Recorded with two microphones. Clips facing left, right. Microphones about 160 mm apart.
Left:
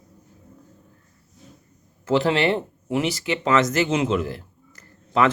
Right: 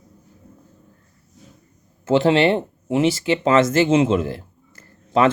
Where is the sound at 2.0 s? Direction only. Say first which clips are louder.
Right 4 dB; 25° right (ahead or behind).